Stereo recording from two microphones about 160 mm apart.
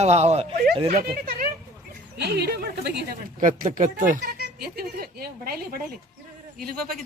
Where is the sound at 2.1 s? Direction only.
90° right.